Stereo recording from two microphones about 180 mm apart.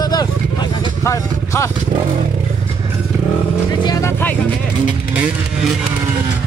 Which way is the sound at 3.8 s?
20° left (ahead or behind).